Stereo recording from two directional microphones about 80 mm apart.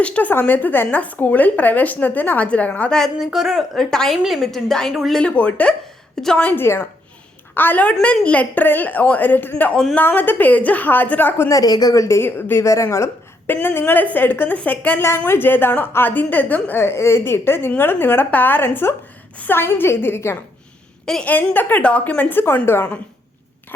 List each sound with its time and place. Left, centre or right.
0.0 s speech: centre
3.2 s a woman's voice: centre
3.9 s a woman's voice: centre
5.2 s speech: centre
6.6 s a woman's voice: left
11.4 s a woman's voice: left
21.0 s a woman's voice: centre